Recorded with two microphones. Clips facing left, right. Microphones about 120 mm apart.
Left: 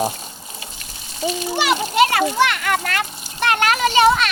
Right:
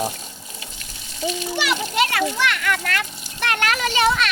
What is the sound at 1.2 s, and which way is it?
A child's voice, 35° left (ahead or behind).